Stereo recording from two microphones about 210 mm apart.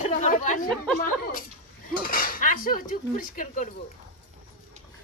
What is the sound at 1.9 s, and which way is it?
Dishes, 45° left (ahead or behind).